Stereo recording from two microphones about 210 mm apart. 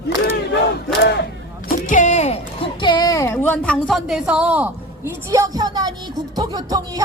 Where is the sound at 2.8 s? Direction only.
20° left (ahead or behind).